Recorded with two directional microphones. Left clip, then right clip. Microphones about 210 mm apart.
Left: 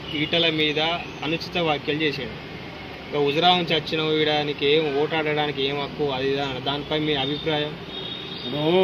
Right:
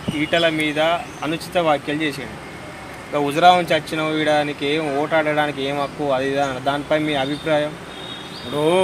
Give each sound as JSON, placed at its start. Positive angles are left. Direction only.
{"t": 0.3, "sound": "speech", "side_deg": -30}
{"t": 3.2, "sound": "speech", "side_deg": -35}